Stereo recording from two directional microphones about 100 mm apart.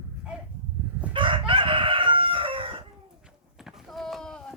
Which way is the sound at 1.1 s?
55° right (ahead or behind).